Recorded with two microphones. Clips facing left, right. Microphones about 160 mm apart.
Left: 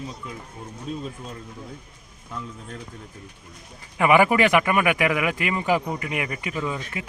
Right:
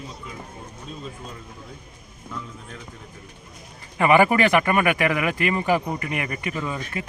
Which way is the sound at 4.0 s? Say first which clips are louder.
Even; 10° left (ahead or behind).